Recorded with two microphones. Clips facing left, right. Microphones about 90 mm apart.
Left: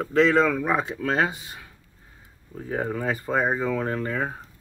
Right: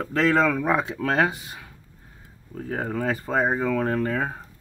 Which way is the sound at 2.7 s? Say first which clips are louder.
Even; 50° right (ahead or behind).